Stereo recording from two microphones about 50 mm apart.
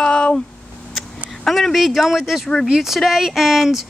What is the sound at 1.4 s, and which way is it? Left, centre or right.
Speech, centre.